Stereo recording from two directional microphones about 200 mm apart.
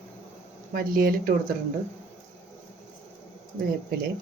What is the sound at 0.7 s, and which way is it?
Speech, 45° right (ahead or behind).